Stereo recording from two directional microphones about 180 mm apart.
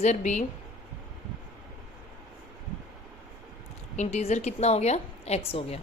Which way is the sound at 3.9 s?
40° left (ahead or behind).